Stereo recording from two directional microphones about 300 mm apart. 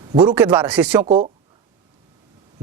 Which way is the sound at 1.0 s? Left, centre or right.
Right.